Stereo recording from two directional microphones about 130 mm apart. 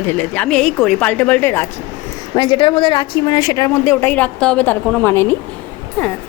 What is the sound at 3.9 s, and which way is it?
Speech, 15° left (ahead or behind).